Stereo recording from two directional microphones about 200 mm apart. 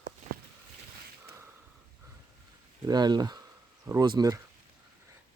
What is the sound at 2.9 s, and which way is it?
Speech, 20° right (ahead or behind).